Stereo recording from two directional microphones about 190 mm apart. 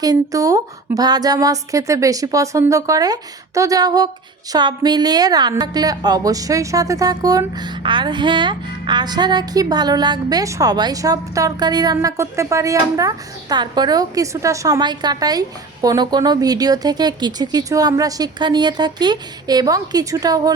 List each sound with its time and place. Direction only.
0.0 s a woman's voice: 20° right (ahead or behind)